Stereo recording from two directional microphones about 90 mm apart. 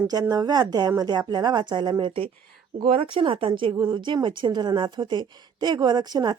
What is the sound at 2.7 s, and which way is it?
A woman's voice, 75° right (ahead or behind).